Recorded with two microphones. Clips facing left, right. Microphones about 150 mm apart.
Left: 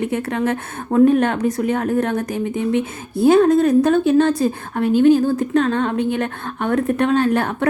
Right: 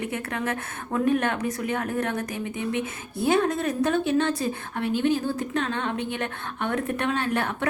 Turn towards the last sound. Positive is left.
turn(degrees=35)  # may be behind; listen again after turning